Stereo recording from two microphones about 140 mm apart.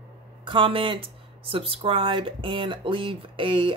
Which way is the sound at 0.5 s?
40° right (ahead or behind).